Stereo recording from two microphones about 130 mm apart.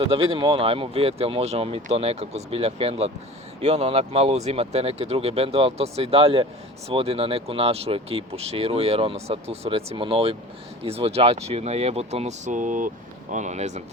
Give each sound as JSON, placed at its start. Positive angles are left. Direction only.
{"t": 0.0, "sound": "speech", "side_deg": -45}
{"t": 13.3, "sound": "speech", "side_deg": -65}